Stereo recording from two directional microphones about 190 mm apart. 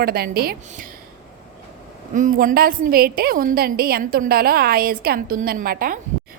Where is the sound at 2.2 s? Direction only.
45° right (ahead or behind).